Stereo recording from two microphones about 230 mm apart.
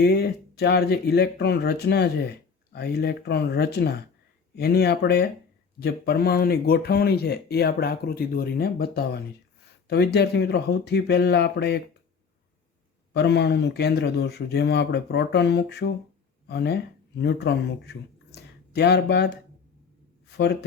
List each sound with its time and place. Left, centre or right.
0.0 s speech: left
13.1 s speech: left